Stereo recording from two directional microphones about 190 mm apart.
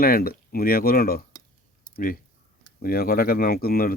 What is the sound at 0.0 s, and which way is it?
Speech, 50° left (ahead or behind).